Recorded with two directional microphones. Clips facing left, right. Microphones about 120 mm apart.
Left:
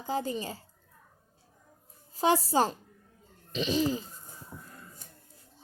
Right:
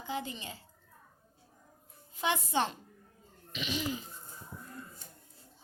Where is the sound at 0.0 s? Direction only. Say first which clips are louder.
Left 6 dB; 40° left (ahead or behind).